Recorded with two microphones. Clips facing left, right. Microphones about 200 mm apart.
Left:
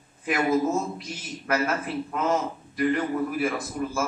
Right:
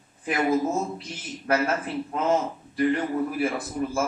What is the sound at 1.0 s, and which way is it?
Speech, 30° right (ahead or behind).